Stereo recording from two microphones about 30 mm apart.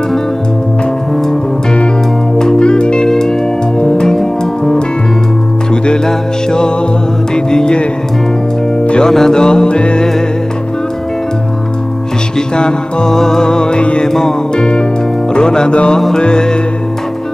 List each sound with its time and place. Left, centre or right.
2.5 s music: left
3.0 s music: centre
6.0 s music: left
9.0 s music: centre
9.7 s music: left
12.4 s music: left
13.7 s music: left
14.0 s music: centre